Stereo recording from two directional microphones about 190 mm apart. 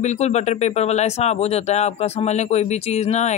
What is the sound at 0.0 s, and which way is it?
Speech, 35° left (ahead or behind).